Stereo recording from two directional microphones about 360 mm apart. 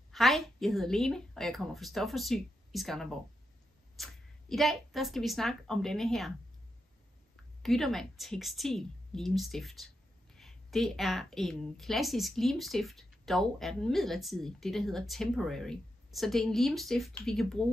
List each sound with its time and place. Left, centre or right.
0.1 s a woman's voice: centre
7.6 s a woman's voice: centre